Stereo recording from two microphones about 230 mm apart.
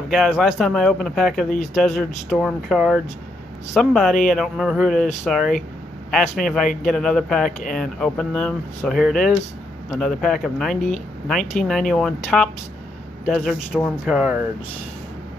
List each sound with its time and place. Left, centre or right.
0.1 s speech: centre
1.5 s speech: left
1.8 s speech: centre